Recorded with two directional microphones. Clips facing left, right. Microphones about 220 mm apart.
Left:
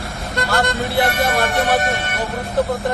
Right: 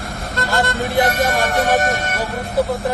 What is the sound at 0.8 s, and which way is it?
Speech, 15° right (ahead or behind).